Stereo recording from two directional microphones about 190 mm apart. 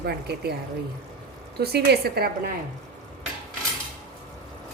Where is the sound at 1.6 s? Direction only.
55° right (ahead or behind).